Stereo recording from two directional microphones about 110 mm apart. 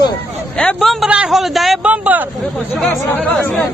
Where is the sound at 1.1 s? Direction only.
5° right (ahead or behind).